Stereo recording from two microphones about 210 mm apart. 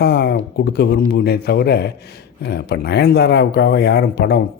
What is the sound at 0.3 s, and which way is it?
Speech, 50° left (ahead or behind).